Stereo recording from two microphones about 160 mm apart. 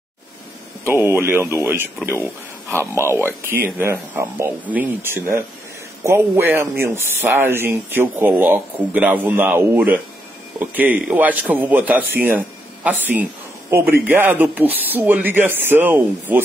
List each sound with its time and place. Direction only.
0.8 s speech: 15° right (ahead or behind)